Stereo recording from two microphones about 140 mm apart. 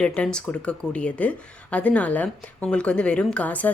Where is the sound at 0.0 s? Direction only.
5° left (ahead or behind).